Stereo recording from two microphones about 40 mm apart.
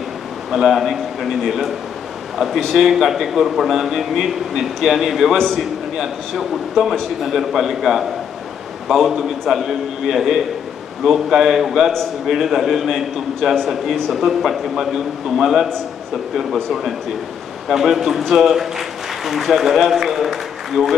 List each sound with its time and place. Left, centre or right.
0.5 s a man's voice: centre
2.3 s a man's voice: centre
10.0 s a man's voice: centre
13.4 s a man's voice: centre
14.1 s a man's voice: centre
17.6 s a man's voice: centre